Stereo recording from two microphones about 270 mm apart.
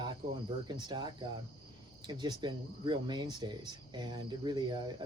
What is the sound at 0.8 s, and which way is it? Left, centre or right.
Speech, centre.